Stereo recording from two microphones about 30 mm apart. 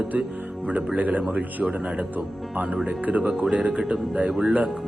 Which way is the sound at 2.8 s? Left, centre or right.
Right.